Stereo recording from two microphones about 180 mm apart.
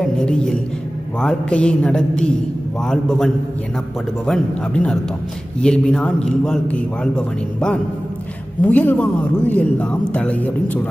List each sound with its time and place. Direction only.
0.0 s a woman's voice: 5° left (ahead or behind)
4.3 s a man's voice: 5° left (ahead or behind)